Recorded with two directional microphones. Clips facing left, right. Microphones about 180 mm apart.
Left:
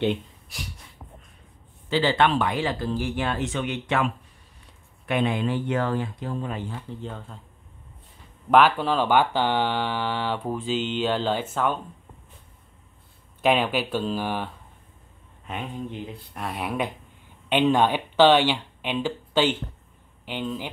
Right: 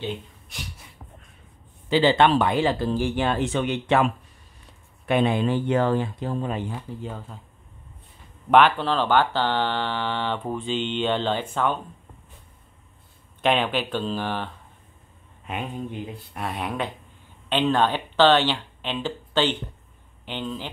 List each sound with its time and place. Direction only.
1.9 s speech: 20° right (ahead or behind)
2.2 s speech: 30° right (ahead or behind)
6.5 s speech: 15° right (ahead or behind)
8.5 s speech: 5° left (ahead or behind)
13.4 s speech: 5° left (ahead or behind)
16.3 s speech: centre (ahead or behind)